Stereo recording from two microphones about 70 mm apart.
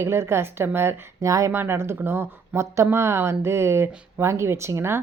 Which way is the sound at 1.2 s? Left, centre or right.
Right.